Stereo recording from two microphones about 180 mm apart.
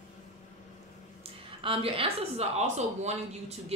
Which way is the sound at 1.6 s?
30° right (ahead or behind).